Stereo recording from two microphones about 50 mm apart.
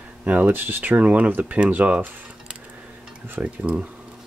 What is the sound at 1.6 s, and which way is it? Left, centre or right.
Speech, right.